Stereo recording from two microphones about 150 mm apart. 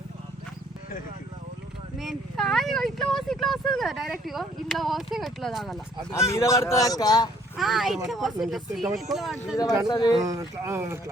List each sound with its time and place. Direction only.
2.0 s speech: centre (ahead or behind)
6.2 s speech: 20° left (ahead or behind)
7.5 s speech: centre (ahead or behind)
9.9 s speech: 25° left (ahead or behind)
10.2 s speech: 20° right (ahead or behind)